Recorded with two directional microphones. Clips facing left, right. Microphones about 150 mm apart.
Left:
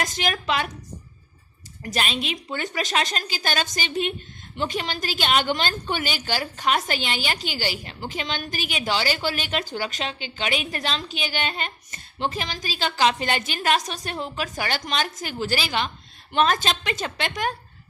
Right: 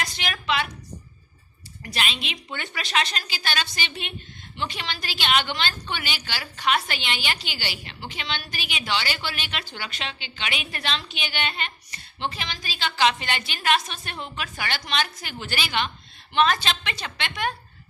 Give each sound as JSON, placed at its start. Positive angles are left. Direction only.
{"t": 0.0, "sound": "a woman's voice", "side_deg": 45}
{"t": 1.8, "sound": "a woman's voice", "side_deg": 40}